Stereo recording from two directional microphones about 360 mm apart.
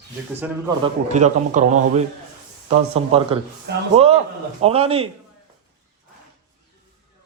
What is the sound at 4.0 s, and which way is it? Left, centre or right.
A man's voice, centre.